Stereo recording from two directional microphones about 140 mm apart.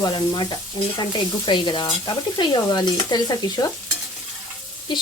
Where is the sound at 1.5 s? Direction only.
30° left (ahead or behind).